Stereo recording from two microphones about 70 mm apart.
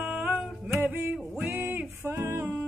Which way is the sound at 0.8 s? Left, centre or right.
Right.